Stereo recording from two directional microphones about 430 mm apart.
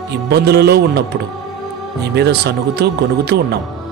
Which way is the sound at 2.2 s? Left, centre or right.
Right.